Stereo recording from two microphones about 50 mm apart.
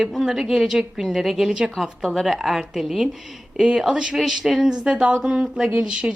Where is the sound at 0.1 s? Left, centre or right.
Centre.